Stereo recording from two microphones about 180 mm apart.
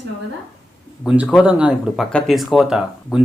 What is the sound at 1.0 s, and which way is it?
Speech, 5° right (ahead or behind).